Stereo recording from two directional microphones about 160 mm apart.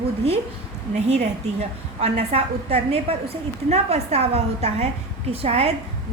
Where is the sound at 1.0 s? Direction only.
45° right (ahead or behind).